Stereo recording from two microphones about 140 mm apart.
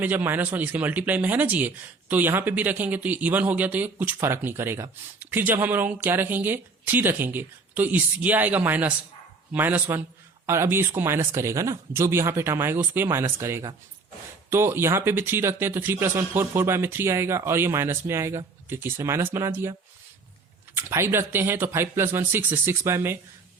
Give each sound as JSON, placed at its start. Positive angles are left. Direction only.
{"t": 0.0, "sound": "speech", "side_deg": -10}
{"t": 20.7, "sound": "speech", "side_deg": -15}